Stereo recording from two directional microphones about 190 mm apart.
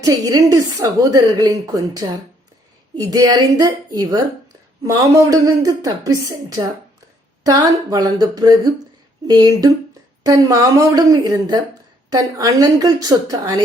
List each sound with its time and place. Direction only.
0.0 s a woman's voice: 20° right (ahead or behind)